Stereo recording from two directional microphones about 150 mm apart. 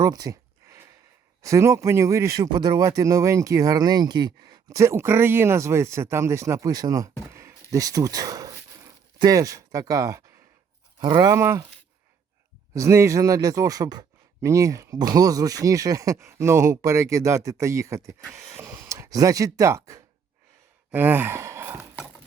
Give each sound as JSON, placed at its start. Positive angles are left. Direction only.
{"t": 0.0, "sound": "a sound", "side_deg": -25}
{"t": 1.4, "sound": "speech", "side_deg": -20}
{"t": 12.7, "sound": "speech", "side_deg": -20}